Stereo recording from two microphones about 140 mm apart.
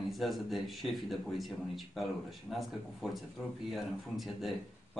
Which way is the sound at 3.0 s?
5° right (ahead or behind).